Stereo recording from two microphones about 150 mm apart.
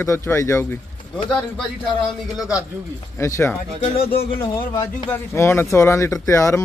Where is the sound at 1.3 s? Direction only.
5° left (ahead or behind).